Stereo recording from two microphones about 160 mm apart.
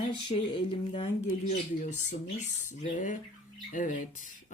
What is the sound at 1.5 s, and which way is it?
A woman's voice, 50° left (ahead or behind).